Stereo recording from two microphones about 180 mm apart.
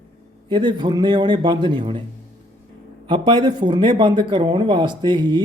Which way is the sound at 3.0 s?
25° right (ahead or behind).